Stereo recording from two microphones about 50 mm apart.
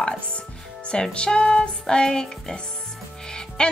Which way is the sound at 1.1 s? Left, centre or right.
Centre.